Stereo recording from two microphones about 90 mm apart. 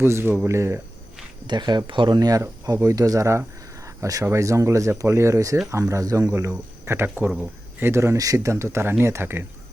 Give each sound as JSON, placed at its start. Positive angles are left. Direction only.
{"t": 0.0, "sound": "speech", "side_deg": -30}
{"t": 1.5, "sound": "speech", "side_deg": -55}
{"t": 2.1, "sound": "speech", "side_deg": -45}
{"t": 2.4, "sound": "speech", "side_deg": -35}